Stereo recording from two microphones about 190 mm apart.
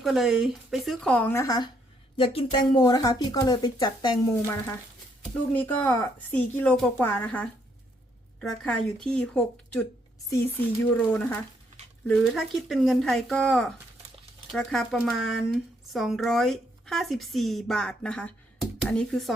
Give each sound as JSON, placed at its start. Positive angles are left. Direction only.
{"t": 0.0, "sound": "speech", "side_deg": 0}
{"t": 5.5, "sound": "a woman's voice", "side_deg": 10}
{"t": 10.9, "sound": "a woman's voice", "side_deg": 10}